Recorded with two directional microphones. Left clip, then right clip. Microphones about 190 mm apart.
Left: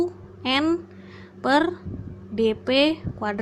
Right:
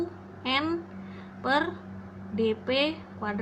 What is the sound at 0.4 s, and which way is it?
A woman's voice, 50° left (ahead or behind).